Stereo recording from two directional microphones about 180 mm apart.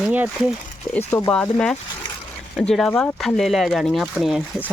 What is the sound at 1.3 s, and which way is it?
Speech, 5° left (ahead or behind).